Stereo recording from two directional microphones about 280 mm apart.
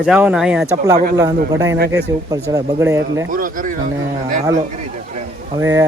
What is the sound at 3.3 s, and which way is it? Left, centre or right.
Speech, right.